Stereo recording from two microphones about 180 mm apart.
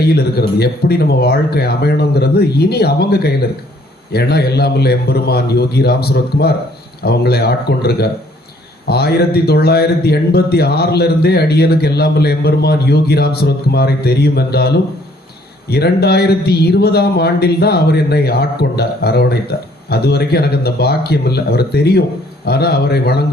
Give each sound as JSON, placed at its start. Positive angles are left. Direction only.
{"t": 0.1, "sound": "speech", "side_deg": 60}
{"t": 15.7, "sound": "speech", "side_deg": 65}